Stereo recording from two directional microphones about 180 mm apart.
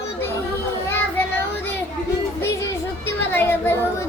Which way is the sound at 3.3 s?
10° left (ahead or behind).